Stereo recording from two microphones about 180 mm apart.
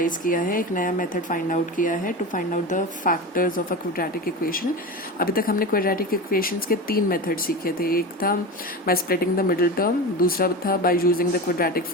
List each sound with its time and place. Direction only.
0.0 s speech: 50° left (ahead or behind)